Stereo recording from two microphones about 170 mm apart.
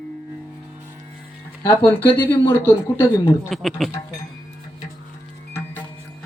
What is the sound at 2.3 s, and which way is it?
Speech, 15° left (ahead or behind).